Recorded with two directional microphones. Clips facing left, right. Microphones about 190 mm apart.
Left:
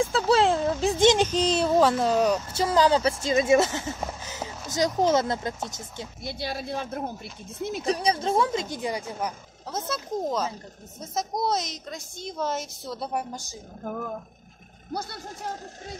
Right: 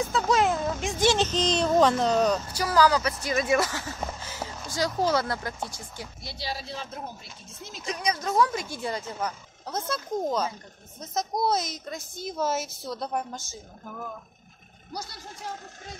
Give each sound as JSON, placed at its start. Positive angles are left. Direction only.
{"t": 0.0, "sound": "a sound", "side_deg": 30}
{"t": 1.0, "sound": "speech", "side_deg": 10}
{"t": 2.5, "sound": "speech", "side_deg": 25}
{"t": 4.2, "sound": "a sound", "side_deg": 20}
{"t": 4.6, "sound": "speech", "side_deg": 20}
{"t": 6.2, "sound": "speech", "side_deg": 55}
{"t": 7.8, "sound": "speech", "side_deg": 35}
{"t": 9.7, "sound": "a woman's voice", "side_deg": 5}
{"t": 14.9, "sound": "speech", "side_deg": 55}